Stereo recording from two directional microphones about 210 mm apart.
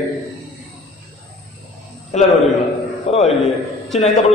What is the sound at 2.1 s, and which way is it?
Speech, 35° left (ahead or behind).